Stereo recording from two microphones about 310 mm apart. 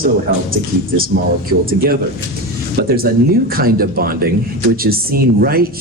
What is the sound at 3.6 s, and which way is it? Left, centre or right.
Speech, right.